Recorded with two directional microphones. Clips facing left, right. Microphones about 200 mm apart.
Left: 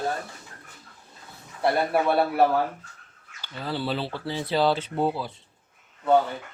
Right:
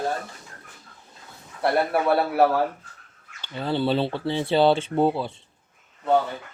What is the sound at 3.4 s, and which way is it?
Speech, 25° right (ahead or behind).